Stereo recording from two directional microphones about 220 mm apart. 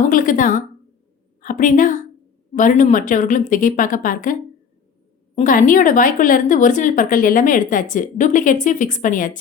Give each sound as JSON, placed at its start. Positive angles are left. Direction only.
{"t": 0.1, "sound": "a woman's voice", "side_deg": 35}